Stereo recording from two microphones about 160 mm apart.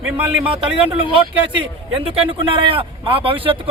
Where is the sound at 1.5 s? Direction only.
35° right (ahead or behind).